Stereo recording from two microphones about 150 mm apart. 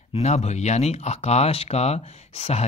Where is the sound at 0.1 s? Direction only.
45° left (ahead or behind).